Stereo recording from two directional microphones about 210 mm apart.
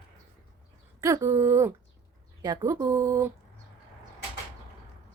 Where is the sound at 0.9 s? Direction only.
15° right (ahead or behind).